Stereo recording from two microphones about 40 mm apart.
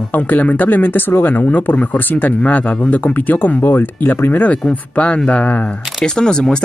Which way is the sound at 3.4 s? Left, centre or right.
Left.